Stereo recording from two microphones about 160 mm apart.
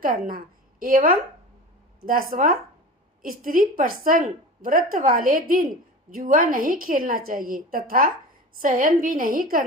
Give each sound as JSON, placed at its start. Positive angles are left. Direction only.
{"t": 0.0, "sound": "a woman's voice", "side_deg": -60}